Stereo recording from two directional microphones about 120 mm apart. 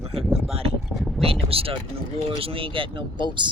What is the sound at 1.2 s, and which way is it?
Speech, 50° right (ahead or behind).